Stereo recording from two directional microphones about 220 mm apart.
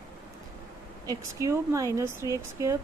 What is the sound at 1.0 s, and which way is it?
Speech, 15° right (ahead or behind).